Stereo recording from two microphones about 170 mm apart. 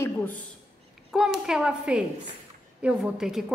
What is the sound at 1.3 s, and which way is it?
A woman's voice, 5° right (ahead or behind).